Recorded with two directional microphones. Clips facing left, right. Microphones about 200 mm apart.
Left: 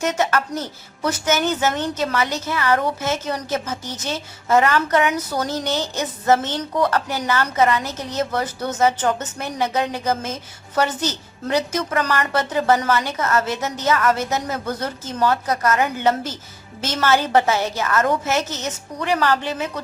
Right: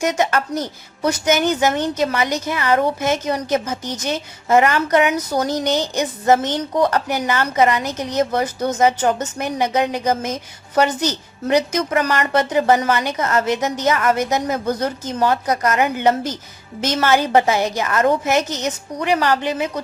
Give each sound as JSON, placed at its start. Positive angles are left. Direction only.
{"t": 0.0, "sound": "a woman's voice", "side_deg": -15}